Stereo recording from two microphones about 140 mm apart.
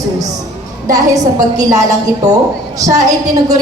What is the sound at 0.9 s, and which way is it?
A woman's voice, 25° right (ahead or behind).